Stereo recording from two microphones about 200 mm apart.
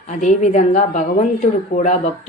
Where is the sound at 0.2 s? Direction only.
35° left (ahead or behind).